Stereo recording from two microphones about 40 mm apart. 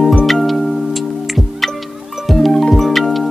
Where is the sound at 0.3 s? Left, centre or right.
Centre.